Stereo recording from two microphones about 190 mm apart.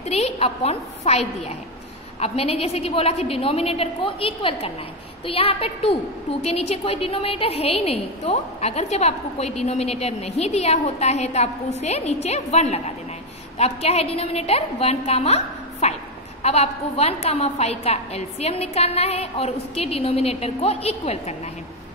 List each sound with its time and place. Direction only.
0.0 s a woman's voice: 35° left (ahead or behind)